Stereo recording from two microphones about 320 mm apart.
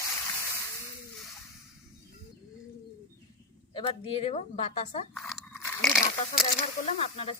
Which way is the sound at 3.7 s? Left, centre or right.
Centre.